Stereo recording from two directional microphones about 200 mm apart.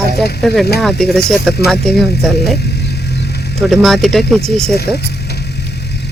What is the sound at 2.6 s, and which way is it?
Vehicle, 55° left (ahead or behind).